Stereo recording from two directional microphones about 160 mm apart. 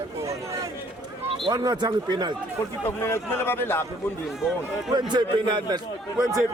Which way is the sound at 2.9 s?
15° left (ahead or behind).